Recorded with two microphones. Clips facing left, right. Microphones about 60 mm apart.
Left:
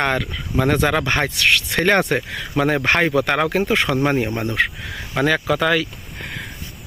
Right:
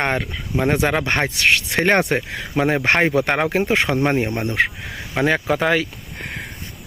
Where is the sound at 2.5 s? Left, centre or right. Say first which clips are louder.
Even; centre.